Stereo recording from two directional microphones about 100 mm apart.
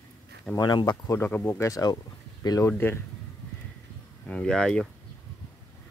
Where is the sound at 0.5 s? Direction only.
45° left (ahead or behind).